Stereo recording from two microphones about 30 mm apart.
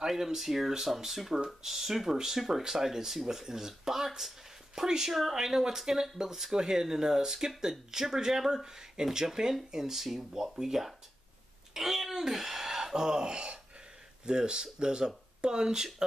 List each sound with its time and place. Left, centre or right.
0.1 s speech: centre